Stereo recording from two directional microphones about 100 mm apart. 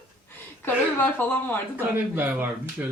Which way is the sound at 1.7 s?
20° right (ahead or behind).